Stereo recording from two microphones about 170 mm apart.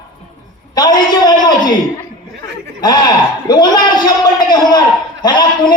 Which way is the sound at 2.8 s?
25° left (ahead or behind).